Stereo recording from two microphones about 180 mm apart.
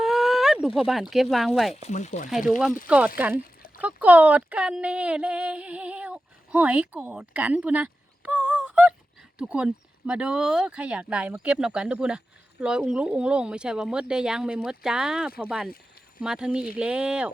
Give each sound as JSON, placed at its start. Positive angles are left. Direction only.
{"t": 0.0, "sound": "a sound", "side_deg": 0}
{"t": 0.8, "sound": "speech", "side_deg": 0}
{"t": 1.9, "sound": "speech", "side_deg": 40}
{"t": 2.5, "sound": "speech", "side_deg": 0}